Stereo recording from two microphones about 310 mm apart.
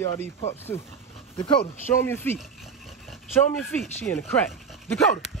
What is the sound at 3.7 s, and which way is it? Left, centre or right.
Speech, centre.